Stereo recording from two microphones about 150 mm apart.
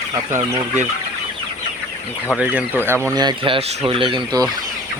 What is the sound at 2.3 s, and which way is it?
Speech, 10° right (ahead or behind).